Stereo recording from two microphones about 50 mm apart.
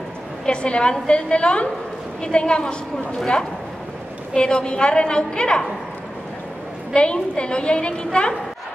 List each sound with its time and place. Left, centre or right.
0.5 s a woman's voice: left
4.3 s a woman's voice: centre
6.9 s a woman's voice: left